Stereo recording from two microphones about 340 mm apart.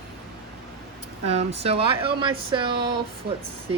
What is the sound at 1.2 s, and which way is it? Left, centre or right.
Speech, centre.